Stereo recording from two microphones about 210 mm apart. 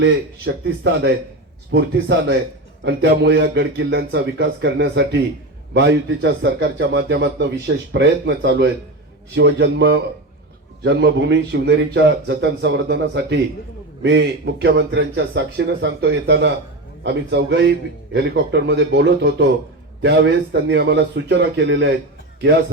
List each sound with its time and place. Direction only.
0.4 s a man's voice: 50° right (ahead or behind)